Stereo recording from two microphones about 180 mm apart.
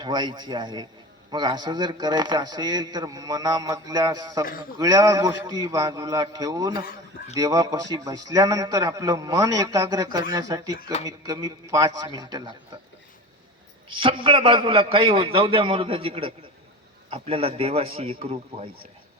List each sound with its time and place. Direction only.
0.0 s a man's voice: 25° right (ahead or behind)
13.8 s a man's voice: 30° right (ahead or behind)